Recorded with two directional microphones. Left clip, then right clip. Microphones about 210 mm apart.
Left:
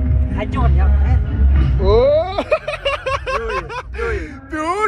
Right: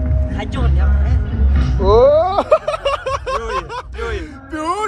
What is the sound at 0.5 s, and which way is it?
Music, 20° left (ahead or behind).